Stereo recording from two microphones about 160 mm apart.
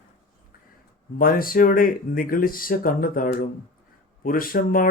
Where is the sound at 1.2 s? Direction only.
65° left (ahead or behind).